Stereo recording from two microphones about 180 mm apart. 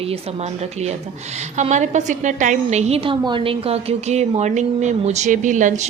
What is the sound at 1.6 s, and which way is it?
A woman's voice, 40° right (ahead or behind).